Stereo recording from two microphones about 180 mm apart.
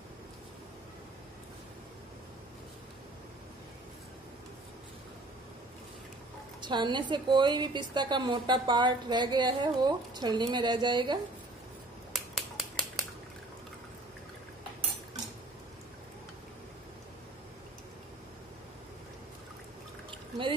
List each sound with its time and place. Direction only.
6.6 s a woman's voice: 25° right (ahead or behind)
12.1 s scissors: centre (ahead or behind)